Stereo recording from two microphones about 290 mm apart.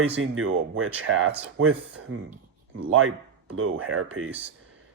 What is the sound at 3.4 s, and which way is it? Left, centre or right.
Speech, right.